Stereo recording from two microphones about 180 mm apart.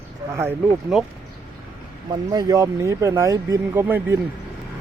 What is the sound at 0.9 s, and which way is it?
Speech, centre (ahead or behind).